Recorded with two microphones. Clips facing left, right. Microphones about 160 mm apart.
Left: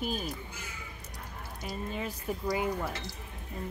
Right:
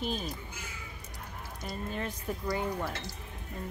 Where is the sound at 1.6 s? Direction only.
5° left (ahead or behind).